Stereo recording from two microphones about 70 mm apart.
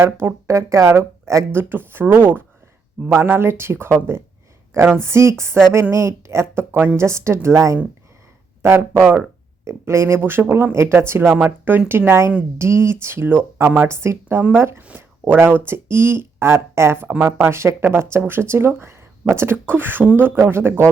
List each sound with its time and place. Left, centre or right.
0.0 s speech: right
1.7 s a woman's voice: right
8.6 s a woman's voice: right
10.2 s speech: right
14.8 s speech: right